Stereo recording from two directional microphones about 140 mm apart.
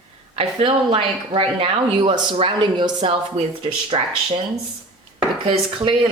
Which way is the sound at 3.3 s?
45° right (ahead or behind).